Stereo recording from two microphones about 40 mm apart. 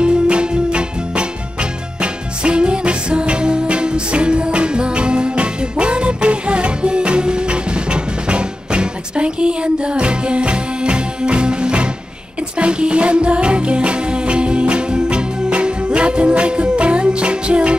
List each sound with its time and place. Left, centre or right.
0.0 s music: right